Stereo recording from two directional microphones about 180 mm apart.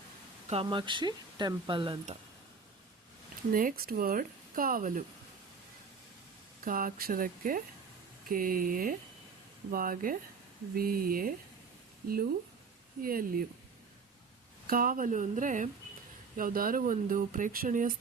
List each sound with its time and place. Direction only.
0.4 s speech: 30° right (ahead or behind)
3.5 s speech: 50° right (ahead or behind)
6.7 s a woman's voice: 50° right (ahead or behind)
14.7 s speech: 50° right (ahead or behind)